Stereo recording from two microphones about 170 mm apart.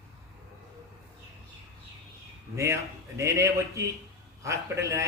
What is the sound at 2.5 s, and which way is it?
A man's voice, 15° right (ahead or behind).